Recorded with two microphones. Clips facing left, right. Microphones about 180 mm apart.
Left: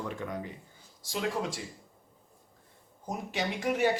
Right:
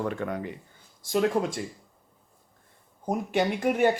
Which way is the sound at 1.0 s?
55° right (ahead or behind).